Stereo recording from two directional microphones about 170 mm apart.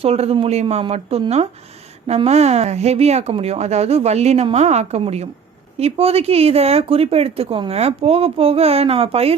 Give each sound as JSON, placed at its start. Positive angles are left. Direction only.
{"t": 0.0, "sound": "speech", "side_deg": -35}